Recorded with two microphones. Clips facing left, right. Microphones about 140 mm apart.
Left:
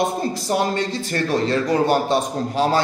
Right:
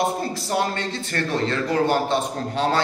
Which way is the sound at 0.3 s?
15° left (ahead or behind).